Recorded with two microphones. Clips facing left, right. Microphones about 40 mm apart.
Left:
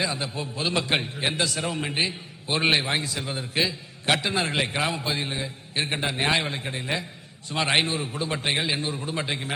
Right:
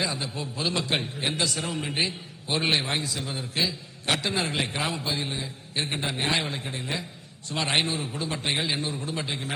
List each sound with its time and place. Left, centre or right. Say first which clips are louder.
0.2 s a man's voice: left 2 dB; centre
1.5 s a man's voice: left 2 dB; centre; by 4.2 s left
4.2 s a man's voice: left 2 dB; centre; by 6.3 s left
6.3 s a man's voice: left 2 dB; centre